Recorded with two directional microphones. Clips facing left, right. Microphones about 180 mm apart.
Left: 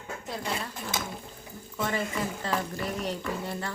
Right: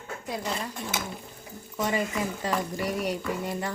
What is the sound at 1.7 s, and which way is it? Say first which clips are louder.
Speech: right 2 dB; 15° right (ahead or behind).